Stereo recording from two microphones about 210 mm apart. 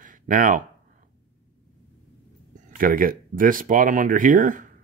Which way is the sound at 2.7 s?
40° right (ahead or behind).